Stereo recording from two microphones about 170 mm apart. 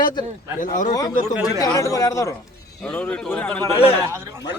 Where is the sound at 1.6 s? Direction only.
20° left (ahead or behind).